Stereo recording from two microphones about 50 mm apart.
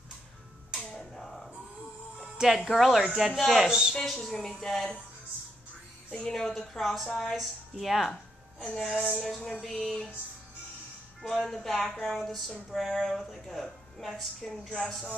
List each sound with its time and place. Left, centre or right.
0.7 s finger snapping: centre
2.1 s music: centre
2.4 s speech: centre
3.6 s speech: centre
4.0 s a woman's voice: centre
6.1 s a woman's voice: centre
11.2 s speech: centre